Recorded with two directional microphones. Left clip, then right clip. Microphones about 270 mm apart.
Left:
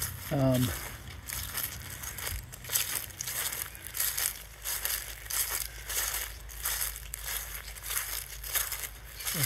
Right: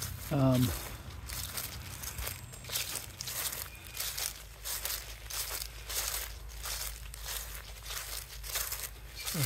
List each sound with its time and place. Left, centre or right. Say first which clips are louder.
0.3 s speech: left 2 dB; centre
1.3 s crushing: left 3 dB; left
2.1 s a sound: left 3 dB; left